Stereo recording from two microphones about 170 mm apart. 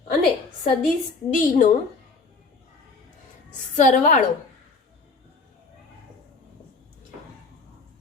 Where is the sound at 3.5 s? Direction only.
45° left (ahead or behind).